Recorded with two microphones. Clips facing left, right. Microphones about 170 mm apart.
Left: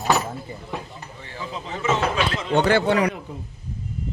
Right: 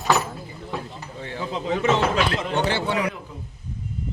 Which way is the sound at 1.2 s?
65° right (ahead or behind).